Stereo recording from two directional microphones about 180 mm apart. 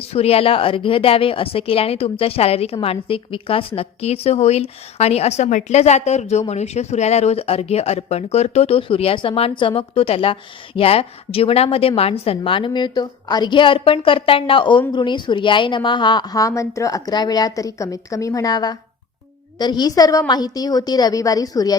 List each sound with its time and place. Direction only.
0.1 s a woman's voice: 35° left (ahead or behind)